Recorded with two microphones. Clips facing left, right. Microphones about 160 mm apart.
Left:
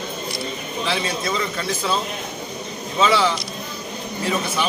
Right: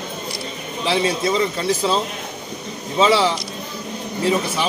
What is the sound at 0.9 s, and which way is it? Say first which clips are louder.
A man's voice: right 6 dB; 30° right (ahead or behind).